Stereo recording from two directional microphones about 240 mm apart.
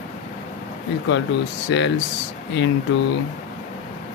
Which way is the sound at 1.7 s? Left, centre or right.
Left.